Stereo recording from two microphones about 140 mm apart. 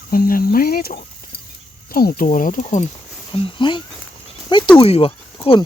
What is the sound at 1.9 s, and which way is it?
Speech, 90° left.